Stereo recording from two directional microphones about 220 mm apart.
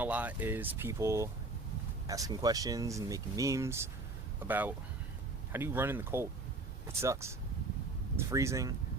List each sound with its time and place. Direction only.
0.0 s speech: 5° right (ahead or behind)